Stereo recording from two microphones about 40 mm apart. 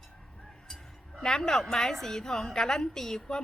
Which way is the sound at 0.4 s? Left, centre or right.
Centre.